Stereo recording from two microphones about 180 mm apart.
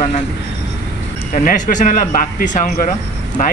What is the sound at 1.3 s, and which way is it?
Speech, 45° left (ahead or behind).